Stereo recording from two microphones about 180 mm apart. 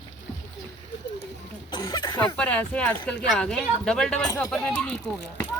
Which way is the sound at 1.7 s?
25° left (ahead or behind).